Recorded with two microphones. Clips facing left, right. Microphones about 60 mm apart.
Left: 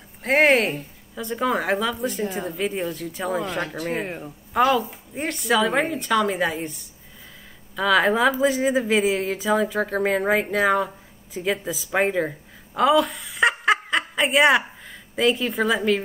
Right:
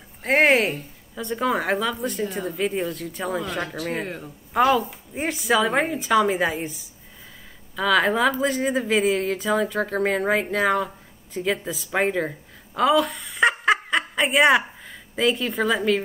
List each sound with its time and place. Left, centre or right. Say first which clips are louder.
0.2 s a woman's voice: even; centre